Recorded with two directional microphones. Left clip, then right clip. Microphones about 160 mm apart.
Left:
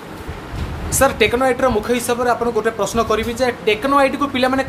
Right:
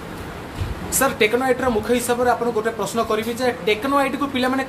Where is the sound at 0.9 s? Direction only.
20° left (ahead or behind).